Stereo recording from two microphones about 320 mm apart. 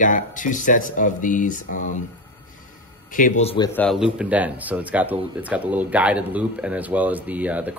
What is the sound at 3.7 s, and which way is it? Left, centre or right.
A man's voice, centre.